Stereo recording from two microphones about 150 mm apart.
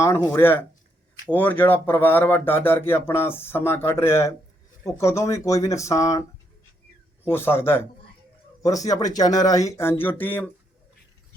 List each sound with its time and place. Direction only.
0.3 s speech: 15° left (ahead or behind)
7.3 s speech: 15° left (ahead or behind)